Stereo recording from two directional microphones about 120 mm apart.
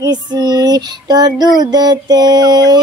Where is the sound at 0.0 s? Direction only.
35° right (ahead or behind).